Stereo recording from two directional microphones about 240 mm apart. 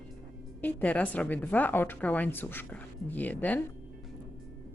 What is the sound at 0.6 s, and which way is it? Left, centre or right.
A woman's voice, centre.